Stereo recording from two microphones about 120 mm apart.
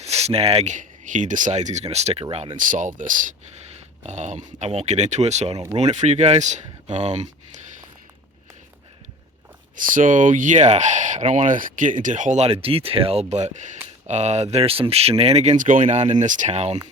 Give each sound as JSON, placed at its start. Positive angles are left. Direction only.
{"t": 0.0, "sound": "speech", "side_deg": -60}
{"t": 2.6, "sound": "speech", "side_deg": -90}
{"t": 4.0, "sound": "speech", "side_deg": -75}
{"t": 9.7, "sound": "speech", "side_deg": -90}
{"t": 12.5, "sound": "speech", "side_deg": -55}